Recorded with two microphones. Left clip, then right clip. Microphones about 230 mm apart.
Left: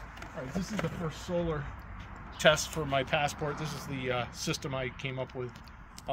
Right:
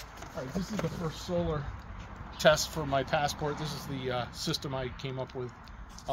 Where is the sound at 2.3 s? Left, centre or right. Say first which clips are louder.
Right 1 dB; centre.